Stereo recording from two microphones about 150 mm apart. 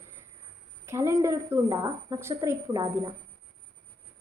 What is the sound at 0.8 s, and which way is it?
Speech, 20° right (ahead or behind).